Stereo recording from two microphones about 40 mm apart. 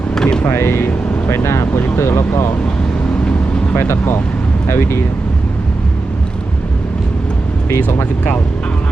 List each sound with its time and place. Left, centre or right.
0.1 s vehicle: centre
0.4 s speech: left
3.8 s speech: left
7.9 s speech: left